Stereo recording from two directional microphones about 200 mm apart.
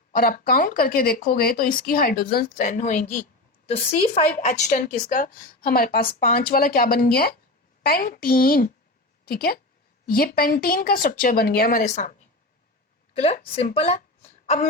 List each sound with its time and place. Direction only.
0.1 s a woman's voice: 45° left (ahead or behind)
13.1 s a woman's voice: 30° left (ahead or behind)